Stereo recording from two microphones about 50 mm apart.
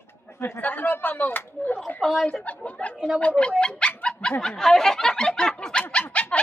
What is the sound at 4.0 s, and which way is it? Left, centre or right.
Dog, centre.